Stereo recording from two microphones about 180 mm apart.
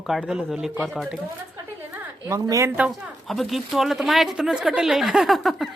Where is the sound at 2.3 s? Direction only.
20° right (ahead or behind).